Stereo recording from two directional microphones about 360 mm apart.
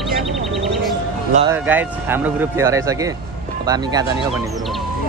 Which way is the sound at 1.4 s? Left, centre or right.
Centre.